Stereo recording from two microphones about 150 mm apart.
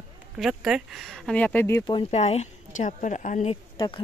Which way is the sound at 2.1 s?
45° left (ahead or behind).